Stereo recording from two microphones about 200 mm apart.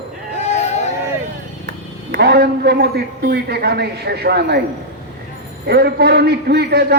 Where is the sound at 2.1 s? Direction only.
55° right (ahead or behind).